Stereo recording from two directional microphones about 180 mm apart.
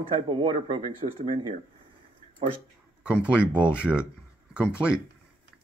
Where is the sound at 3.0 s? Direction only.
5° right (ahead or behind).